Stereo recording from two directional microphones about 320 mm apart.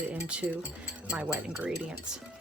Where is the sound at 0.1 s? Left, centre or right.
Centre.